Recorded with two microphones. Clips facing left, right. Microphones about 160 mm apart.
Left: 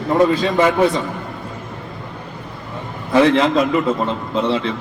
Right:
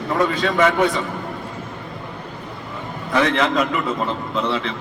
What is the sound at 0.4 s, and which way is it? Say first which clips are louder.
Speech: left 2 dB; 30° left (ahead or behind).